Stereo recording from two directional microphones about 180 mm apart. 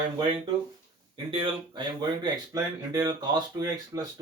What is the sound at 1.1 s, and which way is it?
Speech, 25° right (ahead or behind).